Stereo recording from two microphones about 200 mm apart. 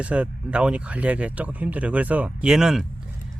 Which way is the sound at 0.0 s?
5° right (ahead or behind).